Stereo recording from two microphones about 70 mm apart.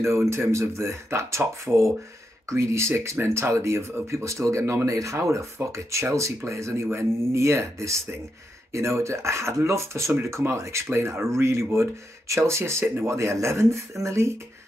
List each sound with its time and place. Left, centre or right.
0.3 s speech: right